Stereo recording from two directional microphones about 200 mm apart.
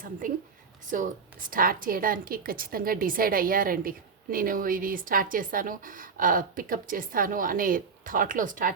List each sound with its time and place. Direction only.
0.2 s a woman's voice: 45° right (ahead or behind)